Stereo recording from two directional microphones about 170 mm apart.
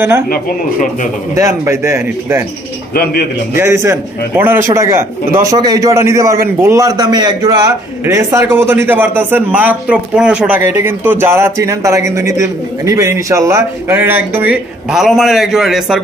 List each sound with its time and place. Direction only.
0.3 s speech: 50° left (ahead or behind)
1.3 s a man's voice: 20° right (ahead or behind)
2.9 s a man's voice: 65° left (ahead or behind)
3.5 s a man's voice: 15° right (ahead or behind)